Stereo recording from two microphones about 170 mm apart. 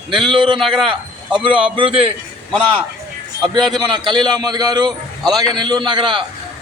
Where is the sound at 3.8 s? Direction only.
25° right (ahead or behind).